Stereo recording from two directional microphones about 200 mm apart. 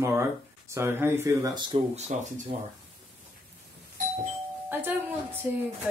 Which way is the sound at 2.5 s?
40° right (ahead or behind).